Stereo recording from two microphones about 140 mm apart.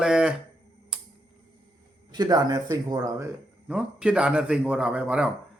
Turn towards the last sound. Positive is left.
turn(degrees=-10)  # may be behind; listen again after turning